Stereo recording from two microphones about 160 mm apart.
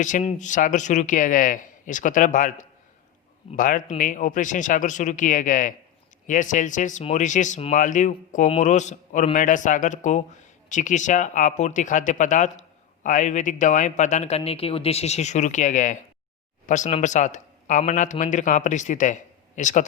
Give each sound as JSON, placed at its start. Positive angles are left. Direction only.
{"t": 0.0, "sound": "speech", "side_deg": 50}